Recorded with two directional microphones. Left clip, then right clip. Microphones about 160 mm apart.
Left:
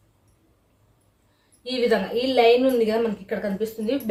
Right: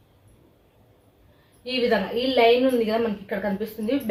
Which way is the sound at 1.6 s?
25° left (ahead or behind).